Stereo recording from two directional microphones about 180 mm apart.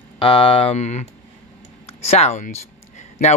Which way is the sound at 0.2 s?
30° left (ahead or behind).